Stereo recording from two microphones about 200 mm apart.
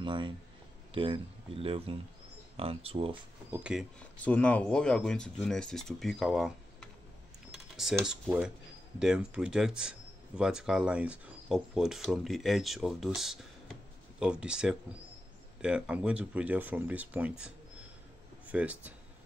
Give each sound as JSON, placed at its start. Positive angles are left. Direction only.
{"t": 0.0, "sound": "speech", "side_deg": -25}
{"t": 3.4, "sound": "speech", "side_deg": -5}
{"t": 4.0, "sound": "speech", "side_deg": 5}
{"t": 18.5, "sound": "speech", "side_deg": -5}